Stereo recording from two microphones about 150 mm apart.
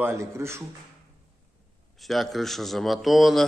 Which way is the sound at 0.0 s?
20° right (ahead or behind).